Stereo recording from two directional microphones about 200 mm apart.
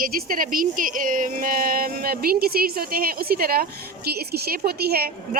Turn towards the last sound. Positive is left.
turn(degrees=-50)  # may be behind; listen again after turning